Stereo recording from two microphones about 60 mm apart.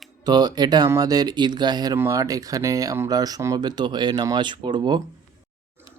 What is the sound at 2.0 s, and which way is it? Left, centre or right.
Speech, right.